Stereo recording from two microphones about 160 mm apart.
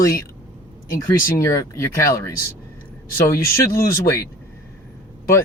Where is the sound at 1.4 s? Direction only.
15° left (ahead or behind).